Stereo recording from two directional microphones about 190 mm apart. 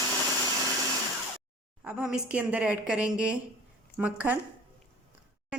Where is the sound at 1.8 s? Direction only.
5° right (ahead or behind).